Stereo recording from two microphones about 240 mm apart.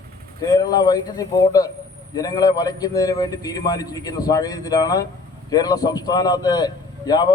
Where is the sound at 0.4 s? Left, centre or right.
Centre.